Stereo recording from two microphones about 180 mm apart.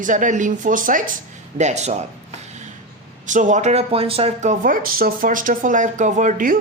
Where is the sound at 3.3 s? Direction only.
45° right (ahead or behind).